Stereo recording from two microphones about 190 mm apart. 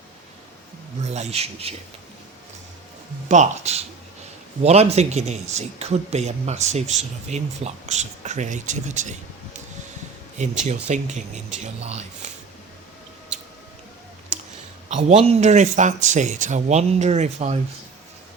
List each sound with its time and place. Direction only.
1.1 s speech: 35° right (ahead or behind)
3.2 s speech: 35° right (ahead or behind)
10.7 s speech: 40° right (ahead or behind)
14.8 s speech: 35° right (ahead or behind)